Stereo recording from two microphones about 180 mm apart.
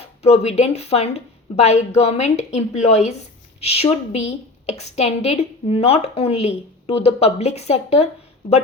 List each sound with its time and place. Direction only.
0.2 s a woman's voice: 35° left (ahead or behind)